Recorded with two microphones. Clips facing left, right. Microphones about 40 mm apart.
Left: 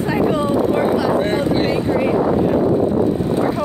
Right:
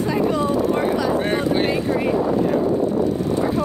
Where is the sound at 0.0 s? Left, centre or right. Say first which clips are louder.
Left 2 dB; left.